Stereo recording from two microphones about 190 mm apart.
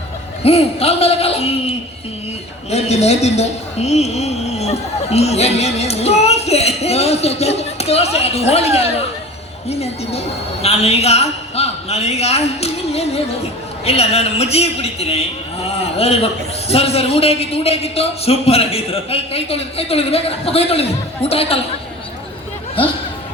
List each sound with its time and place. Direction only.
0.4 s speech: 30° left (ahead or behind)